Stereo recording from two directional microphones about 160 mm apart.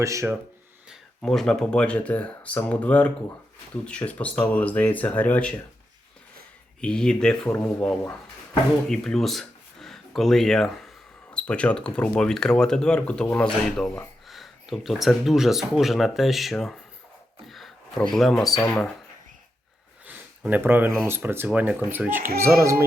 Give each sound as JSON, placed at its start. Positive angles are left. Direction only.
{"t": 0.0, "sound": "speech", "side_deg": -20}
{"t": 0.9, "sound": "speech", "side_deg": 0}
{"t": 6.8, "sound": "speech", "side_deg": 5}
{"t": 17.4, "sound": "a sound", "side_deg": 0}
{"t": 18.1, "sound": "speech", "side_deg": 0}
{"t": 20.1, "sound": "speech", "side_deg": -10}